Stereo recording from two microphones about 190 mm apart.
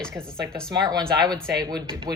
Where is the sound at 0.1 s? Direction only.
15° right (ahead or behind).